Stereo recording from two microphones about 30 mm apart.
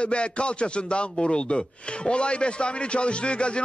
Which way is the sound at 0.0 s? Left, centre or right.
Left.